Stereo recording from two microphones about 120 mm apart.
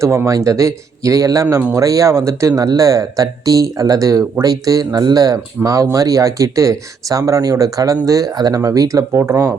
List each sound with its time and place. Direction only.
0.0 s speech: 25° right (ahead or behind)